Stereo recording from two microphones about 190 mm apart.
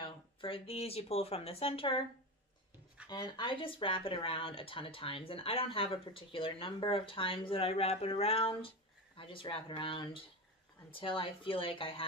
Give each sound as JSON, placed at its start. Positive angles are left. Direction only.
{"t": 0.0, "sound": "speech", "side_deg": 30}
{"t": 3.1, "sound": "speech", "side_deg": 25}